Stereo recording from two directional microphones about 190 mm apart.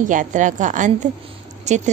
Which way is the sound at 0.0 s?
40° right (ahead or behind).